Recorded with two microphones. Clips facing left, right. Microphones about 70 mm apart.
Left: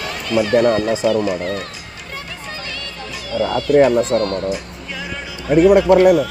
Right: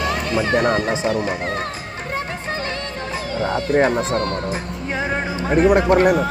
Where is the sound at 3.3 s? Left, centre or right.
Right.